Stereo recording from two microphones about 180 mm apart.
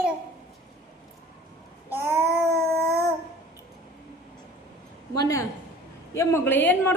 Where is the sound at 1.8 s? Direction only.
10° right (ahead or behind).